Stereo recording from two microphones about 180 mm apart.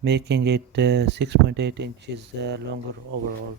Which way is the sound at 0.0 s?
65° right (ahead or behind).